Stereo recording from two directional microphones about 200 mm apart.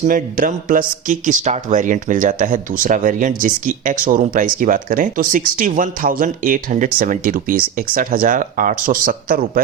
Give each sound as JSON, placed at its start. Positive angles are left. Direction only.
{"t": 0.1, "sound": "speech", "side_deg": -45}